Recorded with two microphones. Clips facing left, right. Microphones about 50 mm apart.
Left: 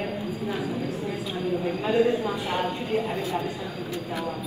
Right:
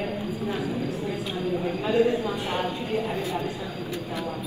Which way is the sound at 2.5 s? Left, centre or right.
Left.